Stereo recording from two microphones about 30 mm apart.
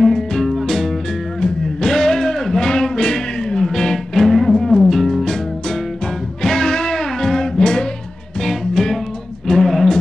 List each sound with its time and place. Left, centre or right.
0.0 s music: left
0.5 s music: centre; by 7.9 s left
8.4 s music: centre